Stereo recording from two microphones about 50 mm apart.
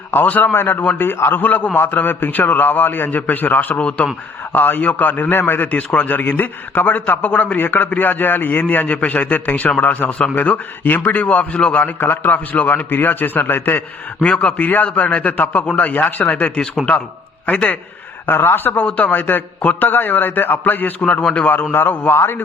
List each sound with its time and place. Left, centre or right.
0.1 s a man's voice: left
1.4 s a man's voice: left
3.8 s a man's voice: left
4.5 s a man's voice: left
10.3 s a man's voice: left
14.2 s a man's voice: left
18.3 s speech: left
18.8 s a man's voice: left
21.0 s a man's voice: left
21.8 s a man's voice: left